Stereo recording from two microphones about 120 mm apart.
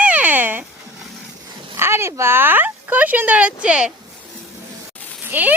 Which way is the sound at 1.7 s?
20° right (ahead or behind).